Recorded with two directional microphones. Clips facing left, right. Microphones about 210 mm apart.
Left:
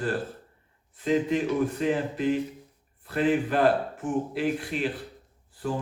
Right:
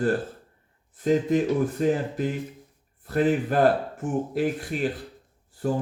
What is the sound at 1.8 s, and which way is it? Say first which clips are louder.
A man's voice: right 2 dB; 45° right (ahead or behind).